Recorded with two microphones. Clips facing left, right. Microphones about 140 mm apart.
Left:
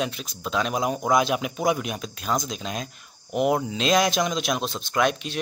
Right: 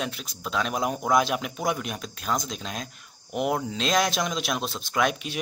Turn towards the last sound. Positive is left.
turn(degrees=-5)  # may be behind; listen again after turning